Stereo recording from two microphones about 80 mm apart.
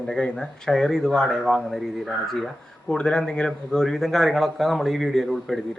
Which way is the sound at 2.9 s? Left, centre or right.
Centre.